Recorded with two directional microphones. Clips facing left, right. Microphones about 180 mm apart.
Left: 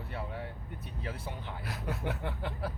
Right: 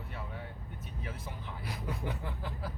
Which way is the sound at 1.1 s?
70° left (ahead or behind).